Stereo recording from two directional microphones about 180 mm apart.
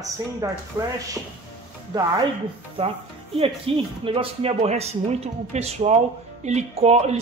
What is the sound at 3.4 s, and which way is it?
Speech, 30° right (ahead or behind).